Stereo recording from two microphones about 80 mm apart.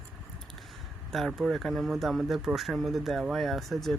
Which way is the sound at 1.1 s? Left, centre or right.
Centre.